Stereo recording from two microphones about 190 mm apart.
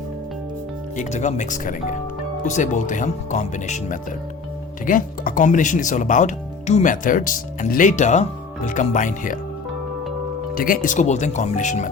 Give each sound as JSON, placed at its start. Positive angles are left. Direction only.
{"t": 0.9, "sound": "speech", "side_deg": 40}
{"t": 10.5, "sound": "speech", "side_deg": 45}